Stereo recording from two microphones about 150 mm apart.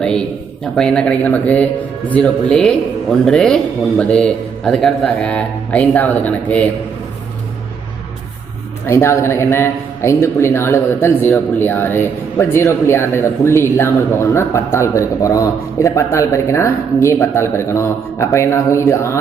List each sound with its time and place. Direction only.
0.0 s a man's voice: 5° left (ahead or behind)
8.9 s a man's voice: 15° left (ahead or behind)